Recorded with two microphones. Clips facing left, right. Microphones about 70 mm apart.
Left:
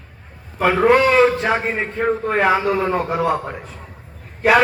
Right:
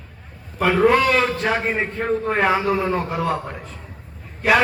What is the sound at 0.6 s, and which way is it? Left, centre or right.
A man's voice, centre.